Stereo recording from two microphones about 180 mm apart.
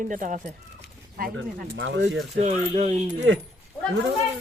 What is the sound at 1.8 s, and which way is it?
Speech, 80° right.